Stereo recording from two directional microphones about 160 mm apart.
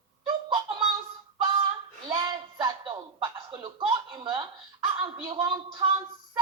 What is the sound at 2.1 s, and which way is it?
A woman's voice, 25° right (ahead or behind).